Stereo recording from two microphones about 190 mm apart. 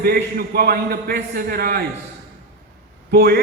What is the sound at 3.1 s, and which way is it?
Speech, 55° right (ahead or behind).